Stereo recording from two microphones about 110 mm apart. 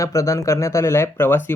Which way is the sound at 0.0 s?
30° left (ahead or behind).